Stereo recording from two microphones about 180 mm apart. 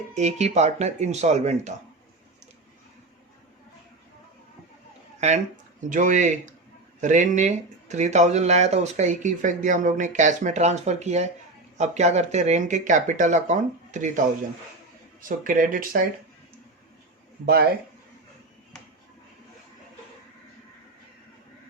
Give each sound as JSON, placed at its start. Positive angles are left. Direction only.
{"t": 0.1, "sound": "speech", "side_deg": -40}
{"t": 5.9, "sound": "speech", "side_deg": -45}
{"t": 17.4, "sound": "speech", "side_deg": -60}